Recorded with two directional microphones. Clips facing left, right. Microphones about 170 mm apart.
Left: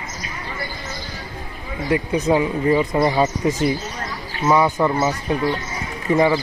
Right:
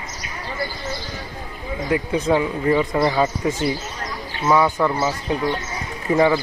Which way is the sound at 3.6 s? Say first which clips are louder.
Left 2 dB; 30° right (ahead or behind).